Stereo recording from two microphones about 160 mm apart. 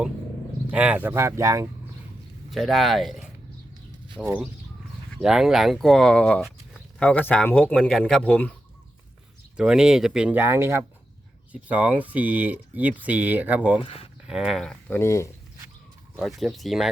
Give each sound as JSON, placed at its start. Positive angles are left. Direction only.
{"t": 0.7, "sound": "speech", "side_deg": -10}
{"t": 2.5, "sound": "speech", "side_deg": 0}
{"t": 9.6, "sound": "speech", "side_deg": -5}
{"t": 13.8, "sound": "speech", "side_deg": 35}
{"t": 14.3, "sound": "speech", "side_deg": -5}
{"t": 14.9, "sound": "speech", "side_deg": 15}
{"t": 16.1, "sound": "speech", "side_deg": 0}